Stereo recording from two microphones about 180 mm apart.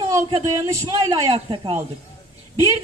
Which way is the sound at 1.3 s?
30° right (ahead or behind).